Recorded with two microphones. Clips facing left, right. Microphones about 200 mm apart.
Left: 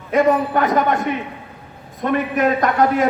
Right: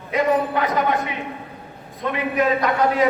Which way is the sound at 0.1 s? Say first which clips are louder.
Left 4 dB; 50° left (ahead or behind).